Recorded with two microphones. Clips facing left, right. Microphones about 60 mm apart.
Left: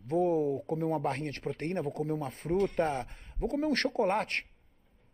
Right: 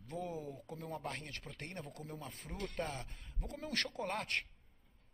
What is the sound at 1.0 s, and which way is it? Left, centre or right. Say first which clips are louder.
A man's voice: left 12 dB; left.